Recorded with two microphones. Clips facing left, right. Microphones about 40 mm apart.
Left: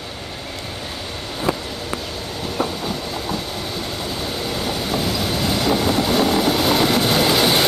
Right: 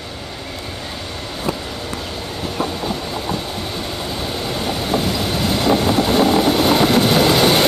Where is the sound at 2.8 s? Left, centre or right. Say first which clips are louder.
Right 2 dB; centre.